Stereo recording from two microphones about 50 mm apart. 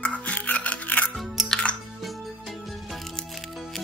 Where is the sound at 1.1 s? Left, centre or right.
Centre.